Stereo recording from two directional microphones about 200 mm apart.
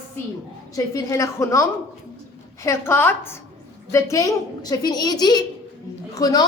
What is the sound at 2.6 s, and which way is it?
A woman's voice, 10° left (ahead or behind).